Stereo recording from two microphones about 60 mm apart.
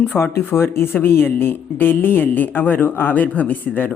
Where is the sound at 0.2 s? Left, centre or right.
Left.